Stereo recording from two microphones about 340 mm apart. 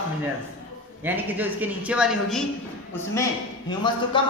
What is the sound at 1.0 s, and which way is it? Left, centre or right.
Speech, centre.